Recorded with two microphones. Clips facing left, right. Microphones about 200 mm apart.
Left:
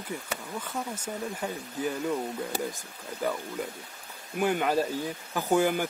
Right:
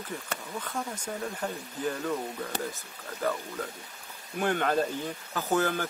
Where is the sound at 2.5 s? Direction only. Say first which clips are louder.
Left 2 dB; 10° left (ahead or behind).